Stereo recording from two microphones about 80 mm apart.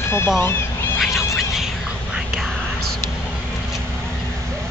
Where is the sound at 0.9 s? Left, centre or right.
Centre.